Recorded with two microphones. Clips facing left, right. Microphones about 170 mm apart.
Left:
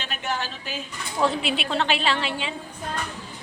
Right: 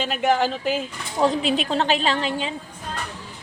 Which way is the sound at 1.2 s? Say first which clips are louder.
Right 4 dB; 40° right (ahead or behind).